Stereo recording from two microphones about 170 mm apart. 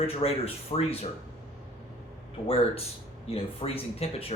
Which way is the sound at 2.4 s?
30° left (ahead or behind).